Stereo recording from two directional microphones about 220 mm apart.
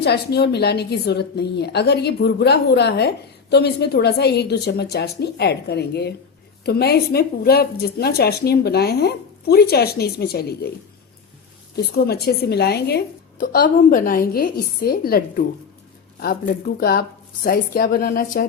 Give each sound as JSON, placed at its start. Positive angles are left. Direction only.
{"t": 0.0, "sound": "a woman's voice", "side_deg": 50}
{"t": 12.0, "sound": "a woman's voice", "side_deg": 45}